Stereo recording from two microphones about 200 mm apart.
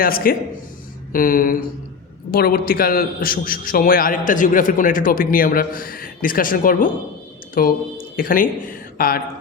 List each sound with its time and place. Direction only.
0.0 s a man's voice: 45° left (ahead or behind)
9.0 s mantra: 45° left (ahead or behind)